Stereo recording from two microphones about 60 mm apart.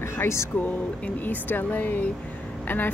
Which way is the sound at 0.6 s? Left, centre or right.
Left.